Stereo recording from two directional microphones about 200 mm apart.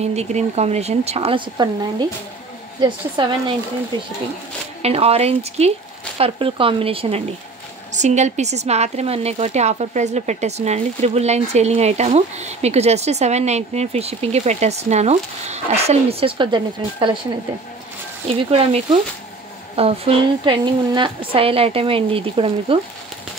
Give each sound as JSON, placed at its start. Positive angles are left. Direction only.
{"t": 0.0, "sound": "a woman's voice", "side_deg": -35}
{"t": 18.5, "sound": "a woman's voice", "side_deg": -30}